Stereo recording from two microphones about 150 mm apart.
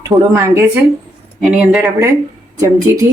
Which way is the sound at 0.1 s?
15° right (ahead or behind).